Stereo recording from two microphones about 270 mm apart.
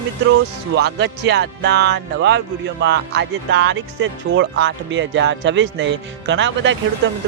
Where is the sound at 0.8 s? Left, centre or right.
Right.